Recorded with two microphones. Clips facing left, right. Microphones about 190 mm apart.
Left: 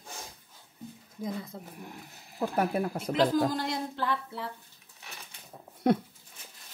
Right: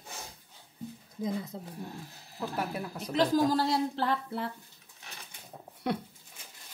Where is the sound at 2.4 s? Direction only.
50° left (ahead or behind).